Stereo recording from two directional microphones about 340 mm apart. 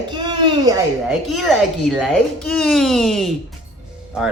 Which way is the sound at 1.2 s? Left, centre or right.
Centre.